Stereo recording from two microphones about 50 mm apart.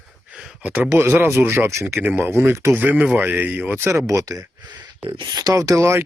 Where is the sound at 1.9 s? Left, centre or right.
Right.